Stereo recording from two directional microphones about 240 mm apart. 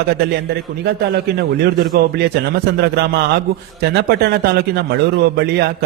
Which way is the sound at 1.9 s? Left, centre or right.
Right.